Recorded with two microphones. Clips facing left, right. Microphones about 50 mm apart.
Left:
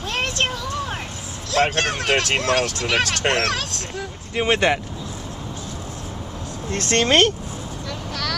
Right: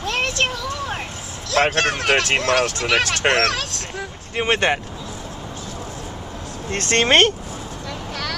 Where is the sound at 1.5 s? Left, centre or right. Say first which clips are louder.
Right 2 dB; right.